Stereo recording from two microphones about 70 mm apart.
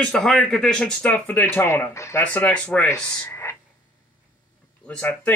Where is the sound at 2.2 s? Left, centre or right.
Left.